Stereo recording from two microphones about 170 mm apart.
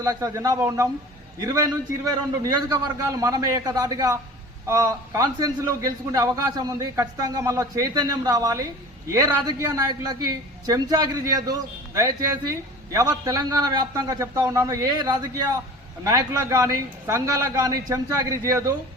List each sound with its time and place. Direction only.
0.0 s a man's voice: 20° right (ahead or behind)